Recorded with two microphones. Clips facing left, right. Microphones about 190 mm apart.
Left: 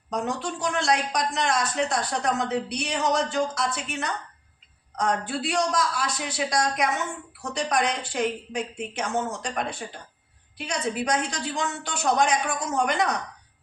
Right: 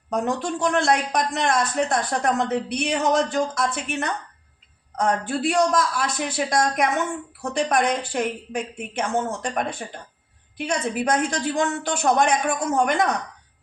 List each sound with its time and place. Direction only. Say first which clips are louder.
0.1 s a man's voice: right 4 dB; 55° right (ahead or behind)